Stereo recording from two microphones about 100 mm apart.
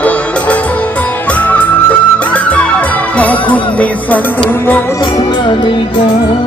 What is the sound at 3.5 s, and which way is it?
Music, 15° left (ahead or behind).